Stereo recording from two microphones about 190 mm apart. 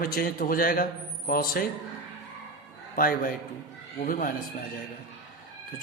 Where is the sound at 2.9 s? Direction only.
50° left (ahead or behind).